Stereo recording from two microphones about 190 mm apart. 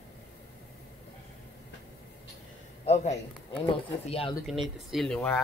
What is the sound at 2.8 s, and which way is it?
A man's voice, 35° left (ahead or behind).